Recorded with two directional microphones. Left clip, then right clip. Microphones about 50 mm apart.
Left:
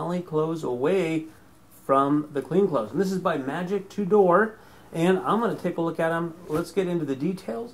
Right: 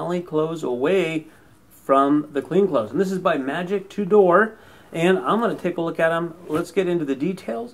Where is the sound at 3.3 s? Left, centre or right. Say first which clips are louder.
Right 4 dB; left.